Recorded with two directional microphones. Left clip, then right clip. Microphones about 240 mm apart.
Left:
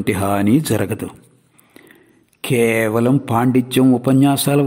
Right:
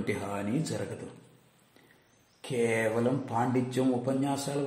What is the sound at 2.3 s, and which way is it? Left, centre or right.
A man's voice, left.